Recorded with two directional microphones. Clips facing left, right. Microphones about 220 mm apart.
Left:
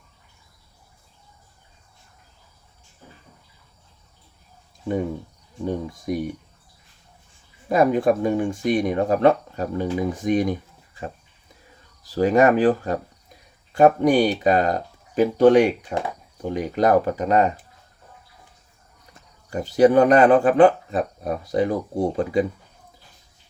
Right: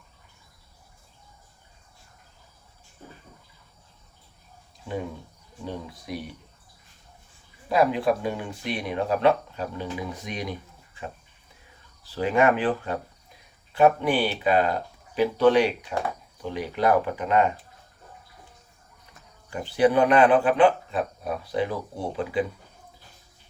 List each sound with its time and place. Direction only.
5.6 s speech: 45° left (ahead or behind)
7.7 s speech: 45° left (ahead or behind)
12.0 s speech: 40° left (ahead or behind)
19.5 s speech: 40° left (ahead or behind)